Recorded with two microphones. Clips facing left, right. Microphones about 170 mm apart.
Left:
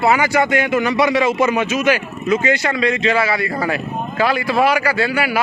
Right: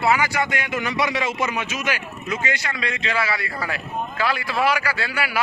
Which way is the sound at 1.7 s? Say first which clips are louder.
Left 10 dB; 90° left.